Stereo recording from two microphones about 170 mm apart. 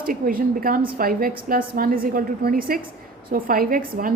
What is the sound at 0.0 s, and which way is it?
A woman's voice, 60° right (ahead or behind).